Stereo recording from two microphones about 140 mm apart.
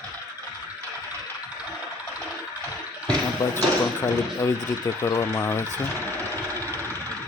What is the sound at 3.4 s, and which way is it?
Speech, 20° left (ahead or behind).